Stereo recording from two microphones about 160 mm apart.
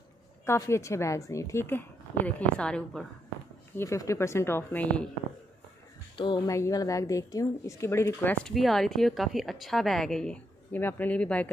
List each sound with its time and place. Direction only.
0.5 s a woman's voice: 15° left (ahead or behind)
3.7 s a woman's voice: 20° left (ahead or behind)
6.1 s a woman's voice: 30° left (ahead or behind); by 8.5 s 10° left (ahead or behind)
8.5 s a woman's voice: centre (ahead or behind)